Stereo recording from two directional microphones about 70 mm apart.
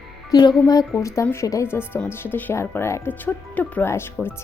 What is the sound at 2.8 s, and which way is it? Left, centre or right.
Speech, left.